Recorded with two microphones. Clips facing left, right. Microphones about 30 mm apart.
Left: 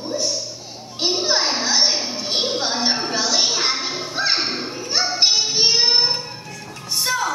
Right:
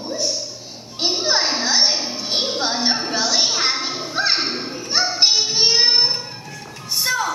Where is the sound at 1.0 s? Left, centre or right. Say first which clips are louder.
Even; centre.